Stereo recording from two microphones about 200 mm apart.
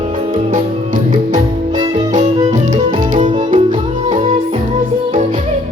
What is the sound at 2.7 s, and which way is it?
Music, 30° right (ahead or behind).